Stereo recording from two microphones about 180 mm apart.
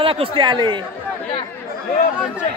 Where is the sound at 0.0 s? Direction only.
30° right (ahead or behind).